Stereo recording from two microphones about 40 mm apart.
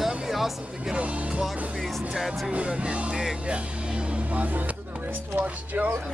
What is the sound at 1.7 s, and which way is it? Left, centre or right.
Speech, centre.